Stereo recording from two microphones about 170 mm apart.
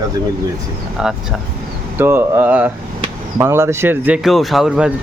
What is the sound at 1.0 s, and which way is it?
A man's voice, 5° right (ahead or behind).